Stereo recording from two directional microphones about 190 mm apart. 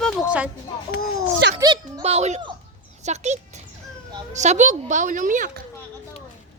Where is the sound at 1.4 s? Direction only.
65° right (ahead or behind).